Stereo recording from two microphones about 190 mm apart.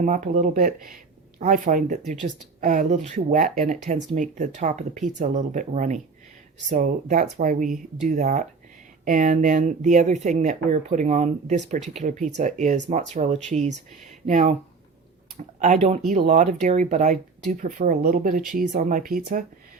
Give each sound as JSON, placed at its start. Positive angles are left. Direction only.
{"t": 0.0, "sound": "speech", "side_deg": -40}
{"t": 15.5, "sound": "speech", "side_deg": -40}